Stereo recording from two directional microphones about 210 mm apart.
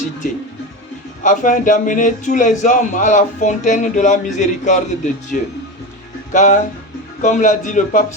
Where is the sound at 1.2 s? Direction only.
35° left (ahead or behind).